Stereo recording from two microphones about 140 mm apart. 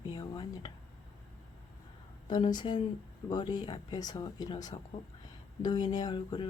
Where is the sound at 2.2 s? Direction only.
30° left (ahead or behind).